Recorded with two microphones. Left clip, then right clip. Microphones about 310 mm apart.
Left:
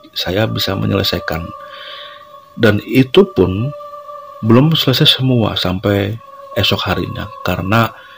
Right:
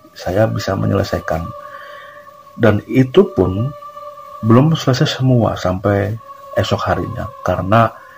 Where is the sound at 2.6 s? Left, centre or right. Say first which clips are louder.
Left 1 dB; left.